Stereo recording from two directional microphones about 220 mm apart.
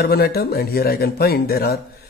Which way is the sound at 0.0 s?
45° left (ahead or behind).